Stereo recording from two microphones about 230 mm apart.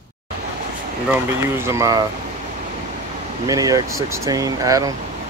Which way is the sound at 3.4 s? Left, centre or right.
Centre.